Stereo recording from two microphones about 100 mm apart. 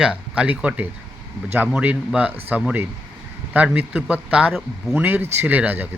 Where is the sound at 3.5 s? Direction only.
15° right (ahead or behind).